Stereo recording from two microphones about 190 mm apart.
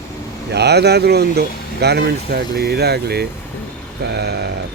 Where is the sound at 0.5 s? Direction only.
60° right (ahead or behind).